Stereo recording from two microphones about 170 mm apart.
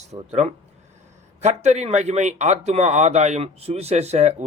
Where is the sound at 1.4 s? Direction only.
40° right (ahead or behind).